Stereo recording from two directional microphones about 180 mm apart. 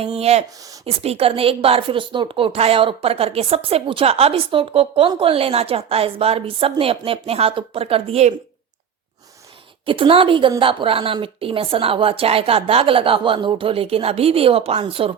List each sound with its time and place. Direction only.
0.2 s a woman's voice: 35° right (ahead or behind)
9.8 s a woman's voice: 30° right (ahead or behind)